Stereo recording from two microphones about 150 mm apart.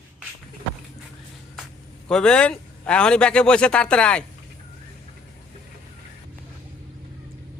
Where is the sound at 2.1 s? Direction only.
5° left (ahead or behind).